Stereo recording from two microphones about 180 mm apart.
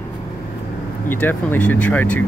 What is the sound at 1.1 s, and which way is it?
Speech, 10° left (ahead or behind).